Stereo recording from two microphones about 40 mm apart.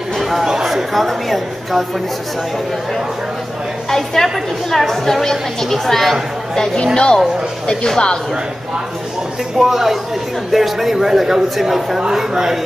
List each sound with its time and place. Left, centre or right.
0.2 s a sound: centre
0.7 s a woman's voice: centre
3.9 s a woman's voice: centre
9.6 s a man's voice: centre